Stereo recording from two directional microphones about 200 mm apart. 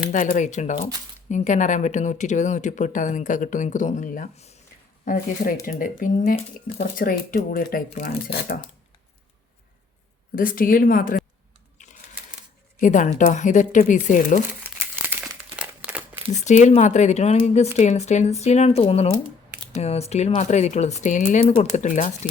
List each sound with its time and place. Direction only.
0.1 s speech: 40° left (ahead or behind)
10.3 s speech: 45° left (ahead or behind)
12.8 s speech: 40° left (ahead or behind)
15.0 s crumpling: 10° right (ahead or behind)
16.3 s speech: 35° left (ahead or behind)